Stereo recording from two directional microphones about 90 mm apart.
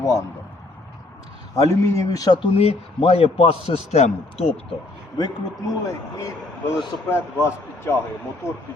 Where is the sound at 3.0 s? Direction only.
90° left.